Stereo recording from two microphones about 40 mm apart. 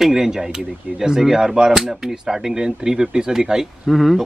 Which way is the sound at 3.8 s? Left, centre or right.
Centre.